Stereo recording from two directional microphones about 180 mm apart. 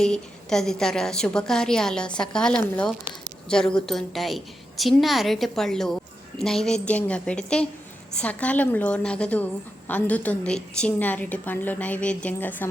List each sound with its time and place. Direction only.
0.0 s a woman's voice: 5° left (ahead or behind)